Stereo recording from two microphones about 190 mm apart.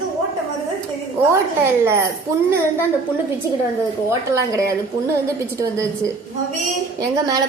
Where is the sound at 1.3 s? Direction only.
15° right (ahead or behind).